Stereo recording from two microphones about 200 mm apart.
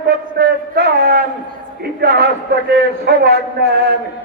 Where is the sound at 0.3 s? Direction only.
50° right (ahead or behind).